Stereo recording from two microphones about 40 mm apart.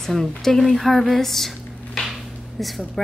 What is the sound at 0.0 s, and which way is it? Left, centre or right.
A woman's voice, centre.